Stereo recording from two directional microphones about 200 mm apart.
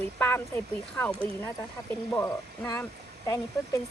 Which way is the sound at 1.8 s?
15° left (ahead or behind).